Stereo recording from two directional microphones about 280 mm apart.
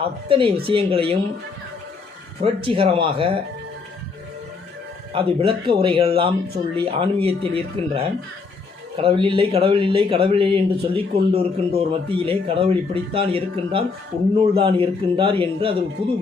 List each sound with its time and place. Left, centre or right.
0.0 s speech: centre
2.6 s speech: centre
5.1 s speech: centre